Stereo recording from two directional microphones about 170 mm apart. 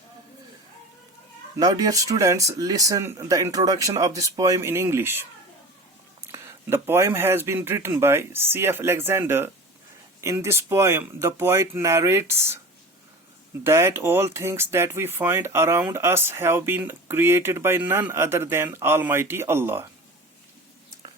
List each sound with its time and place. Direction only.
1.5 s speech: 20° right (ahead or behind)
6.3 s speech: 15° right (ahead or behind)
13.7 s speech: 15° right (ahead or behind)